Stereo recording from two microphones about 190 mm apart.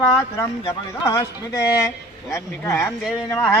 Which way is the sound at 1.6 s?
15° left (ahead or behind).